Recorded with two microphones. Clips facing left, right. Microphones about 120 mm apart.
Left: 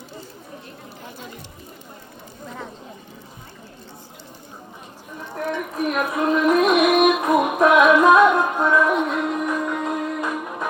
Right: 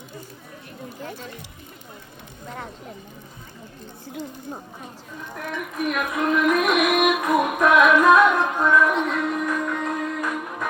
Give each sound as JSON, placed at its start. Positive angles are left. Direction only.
{"t": 5.3, "sound": "music", "side_deg": 30}